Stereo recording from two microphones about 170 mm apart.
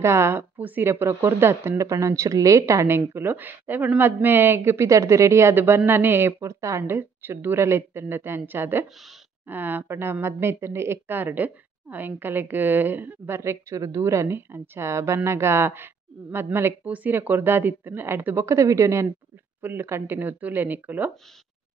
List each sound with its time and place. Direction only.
0.0 s speech: 15° right (ahead or behind)